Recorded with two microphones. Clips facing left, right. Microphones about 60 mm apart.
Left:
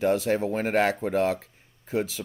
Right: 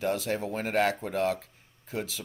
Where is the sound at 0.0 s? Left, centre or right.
Left.